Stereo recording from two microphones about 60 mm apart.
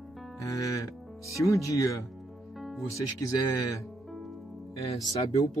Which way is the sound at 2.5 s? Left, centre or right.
Centre.